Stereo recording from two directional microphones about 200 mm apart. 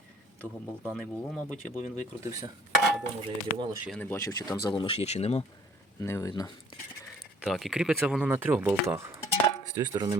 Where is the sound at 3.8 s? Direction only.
5° left (ahead or behind); by 5.5 s 30° left (ahead or behind).